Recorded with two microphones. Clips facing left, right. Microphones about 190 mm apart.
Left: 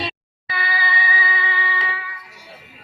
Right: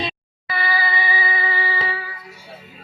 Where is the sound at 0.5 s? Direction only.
40° right (ahead or behind).